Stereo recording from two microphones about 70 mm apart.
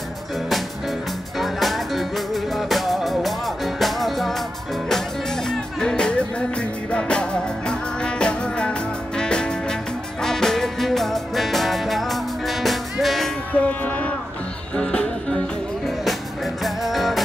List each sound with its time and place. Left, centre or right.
1.4 s music: centre
5.5 s music: centre
13.5 s music: left
16.6 s music: centre